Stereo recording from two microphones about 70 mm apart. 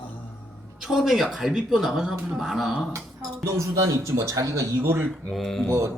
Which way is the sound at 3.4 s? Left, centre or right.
Right.